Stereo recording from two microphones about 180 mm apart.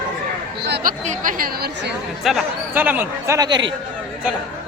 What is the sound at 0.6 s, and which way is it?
Speech, 60° right (ahead or behind).